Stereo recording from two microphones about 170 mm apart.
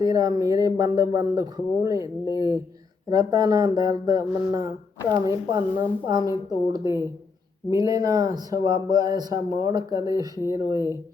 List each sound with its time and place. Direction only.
0.0 s speech: 20° right (ahead or behind)